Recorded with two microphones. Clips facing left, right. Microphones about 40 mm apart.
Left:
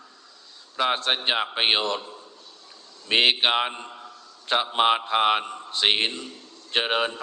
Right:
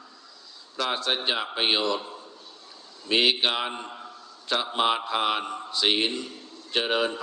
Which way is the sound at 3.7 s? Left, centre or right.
Centre.